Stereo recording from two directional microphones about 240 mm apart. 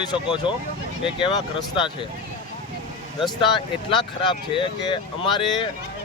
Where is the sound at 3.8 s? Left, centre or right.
Centre.